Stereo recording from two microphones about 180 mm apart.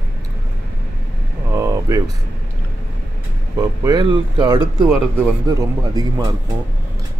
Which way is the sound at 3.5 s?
20° right (ahead or behind).